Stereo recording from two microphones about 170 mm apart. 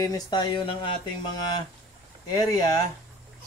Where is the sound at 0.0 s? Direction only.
20° left (ahead or behind).